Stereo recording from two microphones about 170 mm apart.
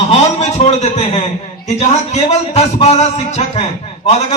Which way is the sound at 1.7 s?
40° left (ahead or behind).